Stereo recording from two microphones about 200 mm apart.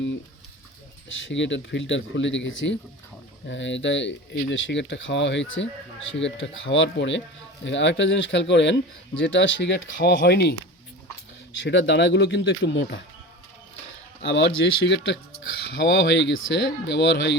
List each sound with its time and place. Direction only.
1.3 s speech: 65° left (ahead or behind)
11.5 s speech: 65° left (ahead or behind)
14.2 s speech: 60° left (ahead or behind)